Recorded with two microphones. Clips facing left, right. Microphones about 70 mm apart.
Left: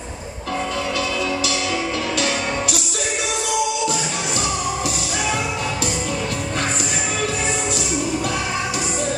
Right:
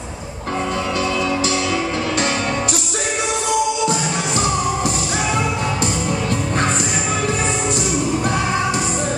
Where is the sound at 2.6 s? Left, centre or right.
Right.